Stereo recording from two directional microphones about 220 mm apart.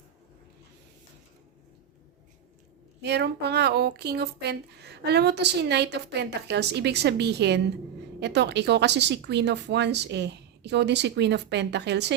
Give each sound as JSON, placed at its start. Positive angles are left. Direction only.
{"t": 3.0, "sound": "speech", "side_deg": -50}